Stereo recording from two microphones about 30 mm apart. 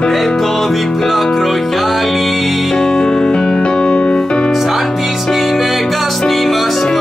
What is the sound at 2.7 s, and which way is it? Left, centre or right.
Music, centre.